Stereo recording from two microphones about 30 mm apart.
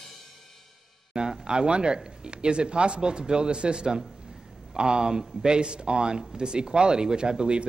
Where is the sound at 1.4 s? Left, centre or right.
Right.